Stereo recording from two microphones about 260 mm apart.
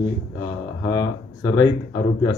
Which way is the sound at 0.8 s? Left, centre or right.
Centre.